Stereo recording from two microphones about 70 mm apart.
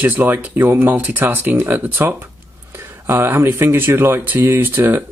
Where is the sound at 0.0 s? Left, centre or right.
Right.